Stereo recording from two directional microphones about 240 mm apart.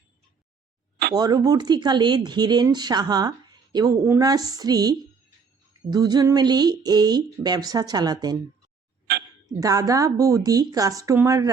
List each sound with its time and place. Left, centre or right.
1.1 s speech: centre
9.1 s a sound: right
9.6 s speech: centre